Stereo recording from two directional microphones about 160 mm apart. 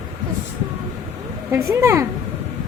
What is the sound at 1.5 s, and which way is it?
Speech, 15° right (ahead or behind).